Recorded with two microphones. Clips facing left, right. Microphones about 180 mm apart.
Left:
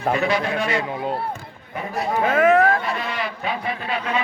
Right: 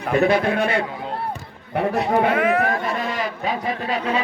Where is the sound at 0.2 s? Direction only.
55° right (ahead or behind).